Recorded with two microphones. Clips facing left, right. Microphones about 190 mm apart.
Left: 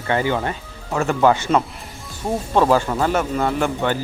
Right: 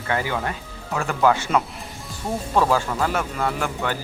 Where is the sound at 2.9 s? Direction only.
25° left (ahead or behind).